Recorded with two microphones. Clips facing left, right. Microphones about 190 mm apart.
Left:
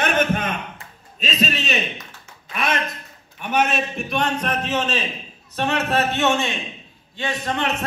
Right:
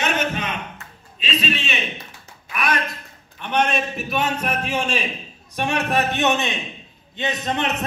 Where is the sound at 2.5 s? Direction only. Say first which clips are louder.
Even; 25° left (ahead or behind).